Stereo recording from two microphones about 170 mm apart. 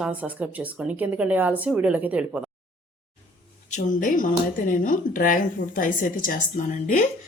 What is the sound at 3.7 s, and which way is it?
Speech, 45° left (ahead or behind).